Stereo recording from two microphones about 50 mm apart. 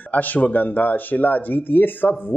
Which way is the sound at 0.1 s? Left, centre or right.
Left.